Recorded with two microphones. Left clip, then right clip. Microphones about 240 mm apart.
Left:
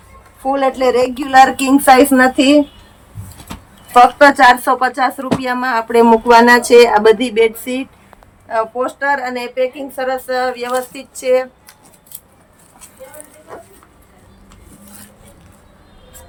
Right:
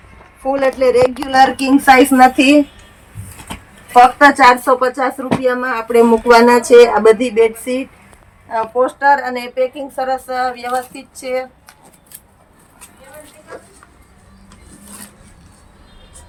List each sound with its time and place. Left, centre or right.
0.5 s a woman's voice: centre
3.5 s speech: centre
5.4 s a woman's voice: centre
8.4 s speech: centre